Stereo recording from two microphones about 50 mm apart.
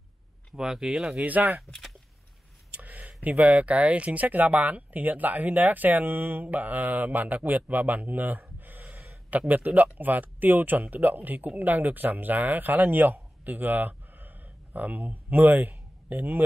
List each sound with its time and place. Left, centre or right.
0.6 s speech: centre
1.1 s speech: right
2.7 s a sound: right
3.2 s speech: right